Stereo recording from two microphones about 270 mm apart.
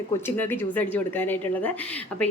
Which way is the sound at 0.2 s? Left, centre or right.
Centre.